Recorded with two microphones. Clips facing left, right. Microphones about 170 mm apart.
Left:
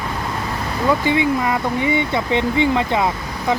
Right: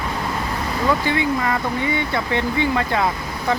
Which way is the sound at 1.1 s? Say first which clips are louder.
Left 3 dB; 15° left (ahead or behind).